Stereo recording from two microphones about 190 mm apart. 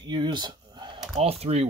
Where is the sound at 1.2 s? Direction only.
35° right (ahead or behind).